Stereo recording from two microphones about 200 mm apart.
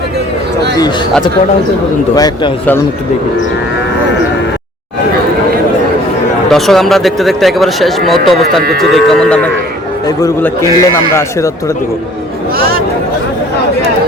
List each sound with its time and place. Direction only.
0.8 s speech: 20° left (ahead or behind)
2.1 s a man's voice: 20° left (ahead or behind)
6.5 s speech: centre (ahead or behind)
10.1 s a man's voice: 15° left (ahead or behind)